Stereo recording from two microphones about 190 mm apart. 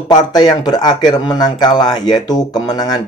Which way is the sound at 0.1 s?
20° left (ahead or behind).